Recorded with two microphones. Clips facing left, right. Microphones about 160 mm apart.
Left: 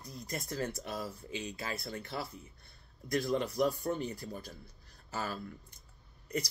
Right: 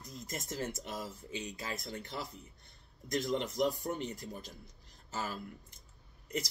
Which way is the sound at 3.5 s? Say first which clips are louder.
Left 2 dB; 20° right (ahead or behind).